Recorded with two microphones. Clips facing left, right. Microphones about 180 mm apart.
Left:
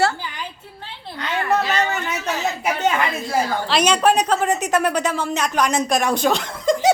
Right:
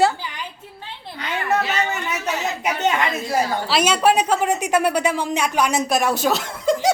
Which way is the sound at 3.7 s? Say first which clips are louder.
Left 1 dB; 5° right (ahead or behind).